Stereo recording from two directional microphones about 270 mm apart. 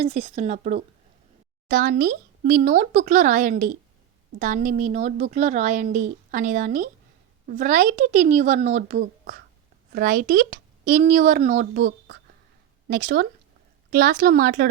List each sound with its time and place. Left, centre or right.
0.0 s a woman's voice: right